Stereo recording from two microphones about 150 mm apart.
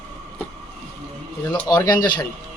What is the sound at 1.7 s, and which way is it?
Speech, 30° left (ahead or behind).